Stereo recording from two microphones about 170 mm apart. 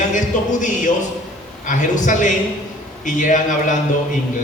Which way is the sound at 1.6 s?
50° left (ahead or behind).